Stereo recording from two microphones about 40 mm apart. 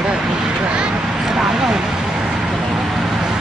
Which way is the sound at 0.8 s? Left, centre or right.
Centre.